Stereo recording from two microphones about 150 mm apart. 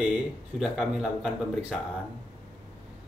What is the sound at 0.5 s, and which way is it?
Speech, 5° right (ahead or behind).